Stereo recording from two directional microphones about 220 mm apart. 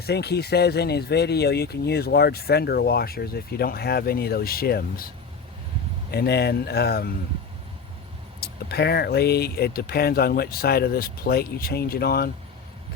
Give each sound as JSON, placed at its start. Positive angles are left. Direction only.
{"t": 0.0, "sound": "speech", "side_deg": 45}
{"t": 8.4, "sound": "speech", "side_deg": 45}